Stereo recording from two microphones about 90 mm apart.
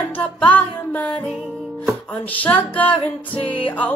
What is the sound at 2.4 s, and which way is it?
Music, 15° left (ahead or behind).